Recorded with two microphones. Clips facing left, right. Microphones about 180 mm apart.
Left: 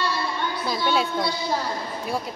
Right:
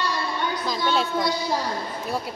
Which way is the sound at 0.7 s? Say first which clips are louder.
Left 1 dB; 10° left (ahead or behind).